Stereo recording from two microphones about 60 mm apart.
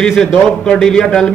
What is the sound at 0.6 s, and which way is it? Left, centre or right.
Speech, centre.